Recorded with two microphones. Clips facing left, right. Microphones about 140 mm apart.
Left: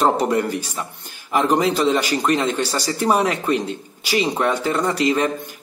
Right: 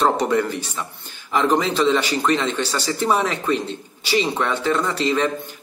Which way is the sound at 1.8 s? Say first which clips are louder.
Even; 10° left (ahead or behind).